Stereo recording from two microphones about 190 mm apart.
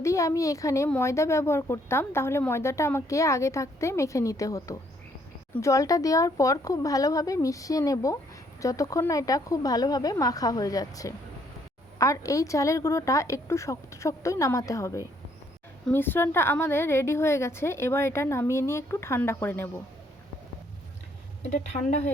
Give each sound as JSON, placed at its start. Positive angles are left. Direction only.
{"t": 0.0, "sound": "a woman's voice", "side_deg": 15}
{"t": 21.5, "sound": "speech", "side_deg": 40}